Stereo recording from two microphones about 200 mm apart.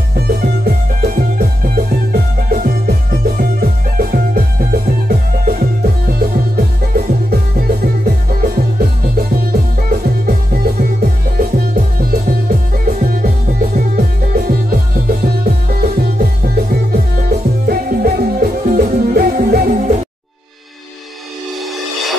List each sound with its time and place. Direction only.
0.1 s music: 50° right (ahead or behind)